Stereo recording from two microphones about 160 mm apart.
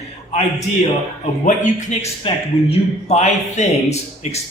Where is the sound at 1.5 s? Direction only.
50° left (ahead or behind).